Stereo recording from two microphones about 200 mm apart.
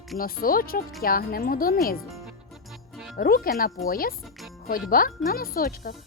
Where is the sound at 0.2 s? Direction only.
45° left (ahead or behind).